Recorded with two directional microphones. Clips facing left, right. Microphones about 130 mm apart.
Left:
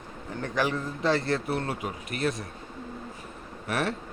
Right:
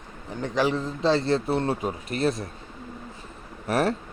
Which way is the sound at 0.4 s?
20° right (ahead or behind).